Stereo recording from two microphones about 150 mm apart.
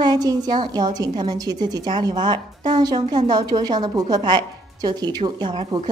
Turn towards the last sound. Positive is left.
turn(degrees=-35)  # may be behind; listen again after turning